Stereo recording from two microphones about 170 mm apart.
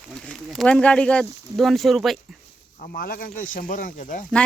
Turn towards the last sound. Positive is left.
turn(degrees=50)  # may be behind; listen again after turning